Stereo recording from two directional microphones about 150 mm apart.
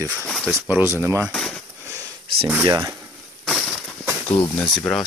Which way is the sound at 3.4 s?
Centre (ahead or behind).